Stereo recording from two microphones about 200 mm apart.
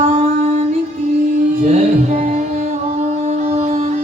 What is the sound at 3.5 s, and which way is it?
Music, 30° right (ahead or behind).